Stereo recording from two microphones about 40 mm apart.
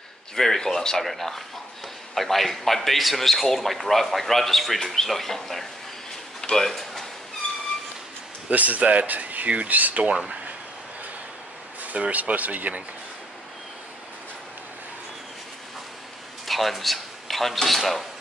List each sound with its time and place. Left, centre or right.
0.4 s a man's voice: centre
6.7 s a sound: centre
8.5 s speech: right
11.8 s speech: right
16.4 s speech: centre